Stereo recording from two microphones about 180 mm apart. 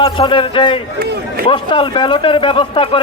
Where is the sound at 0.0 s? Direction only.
30° left (ahead or behind).